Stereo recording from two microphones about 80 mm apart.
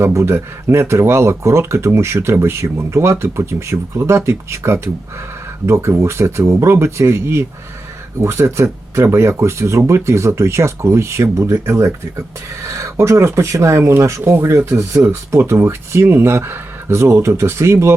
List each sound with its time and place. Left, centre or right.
0.0 s speech: right